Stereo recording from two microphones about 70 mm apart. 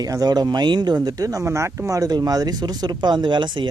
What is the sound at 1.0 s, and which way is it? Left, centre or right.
Speech, right.